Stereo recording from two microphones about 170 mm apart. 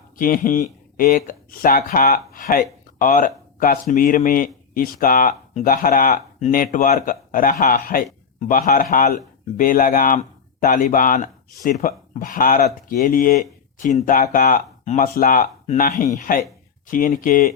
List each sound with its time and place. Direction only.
0.2 s speech: 55° left (ahead or behind)
15.6 s speech: 40° left (ahead or behind)